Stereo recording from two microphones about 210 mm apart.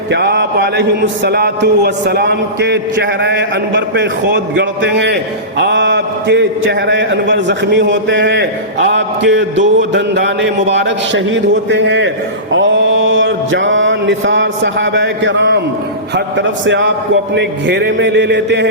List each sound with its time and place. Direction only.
0.1 s a man's voice: 55° right (ahead or behind)
12.5 s mantra: 65° right (ahead or behind)
16.6 s a man's voice: 60° right (ahead or behind)